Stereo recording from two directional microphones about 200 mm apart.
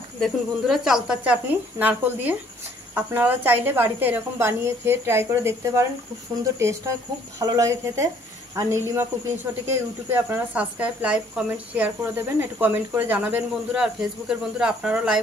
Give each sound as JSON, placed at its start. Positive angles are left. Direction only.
{"t": 0.2, "sound": "speech", "side_deg": 0}